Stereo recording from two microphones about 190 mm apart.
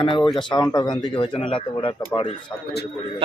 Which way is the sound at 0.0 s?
25° left (ahead or behind).